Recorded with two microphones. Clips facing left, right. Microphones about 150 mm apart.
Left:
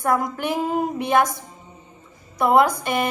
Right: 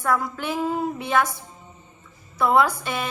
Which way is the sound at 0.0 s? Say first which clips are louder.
Left 3 dB; 15° left (ahead or behind).